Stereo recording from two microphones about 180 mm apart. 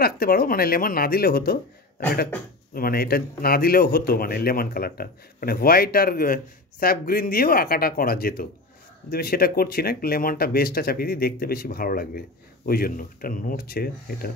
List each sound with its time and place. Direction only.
0.0 s a man's voice: 55° left (ahead or behind)
2.7 s a man's voice: 55° left (ahead or behind)